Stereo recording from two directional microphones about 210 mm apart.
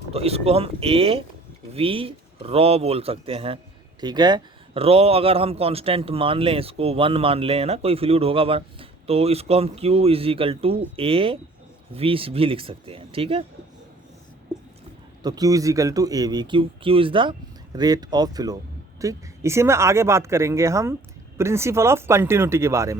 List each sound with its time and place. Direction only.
0.1 s speech: 30° right (ahead or behind)
15.2 s speech: 15° right (ahead or behind)